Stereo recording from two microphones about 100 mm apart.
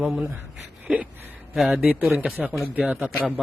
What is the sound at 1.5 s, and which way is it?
A man's voice, 5° right (ahead or behind).